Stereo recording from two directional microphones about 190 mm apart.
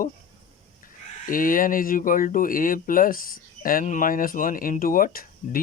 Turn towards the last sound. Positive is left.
turn(degrees=50)  # may be behind; listen again after turning